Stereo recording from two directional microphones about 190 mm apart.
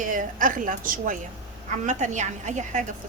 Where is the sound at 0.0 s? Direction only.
45° right (ahead or behind).